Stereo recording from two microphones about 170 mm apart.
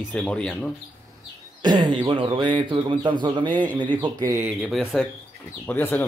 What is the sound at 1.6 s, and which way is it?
Speech, 25° right (ahead or behind).